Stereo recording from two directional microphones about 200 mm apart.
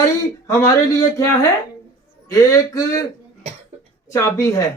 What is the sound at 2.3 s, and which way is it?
Speech, 15° left (ahead or behind).